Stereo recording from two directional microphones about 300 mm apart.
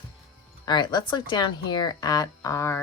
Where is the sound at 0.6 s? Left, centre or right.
Centre.